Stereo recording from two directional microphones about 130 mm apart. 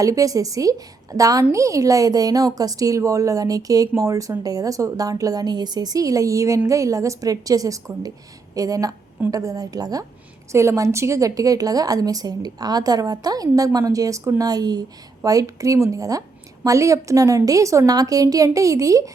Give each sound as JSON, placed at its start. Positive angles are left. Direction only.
{"t": 0.0, "sound": "a woman's voice", "side_deg": -25}